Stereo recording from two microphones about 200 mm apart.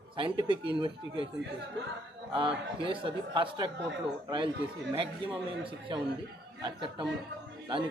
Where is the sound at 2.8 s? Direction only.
25° right (ahead or behind).